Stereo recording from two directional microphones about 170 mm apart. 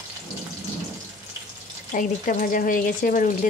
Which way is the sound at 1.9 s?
55° left (ahead or behind).